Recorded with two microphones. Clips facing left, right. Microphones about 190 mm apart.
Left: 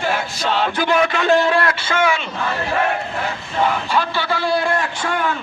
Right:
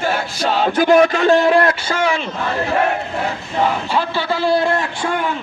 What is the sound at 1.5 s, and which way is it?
Speech, 25° right (ahead or behind).